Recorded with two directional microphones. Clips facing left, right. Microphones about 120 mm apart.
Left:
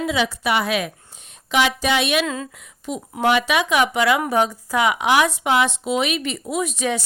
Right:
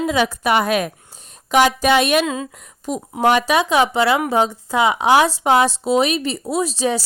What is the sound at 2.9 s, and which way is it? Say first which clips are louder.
A woman's voice: right 3 dB; 40° right (ahead or behind).